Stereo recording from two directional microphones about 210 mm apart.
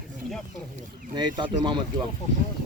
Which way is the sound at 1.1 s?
20° right (ahead or behind).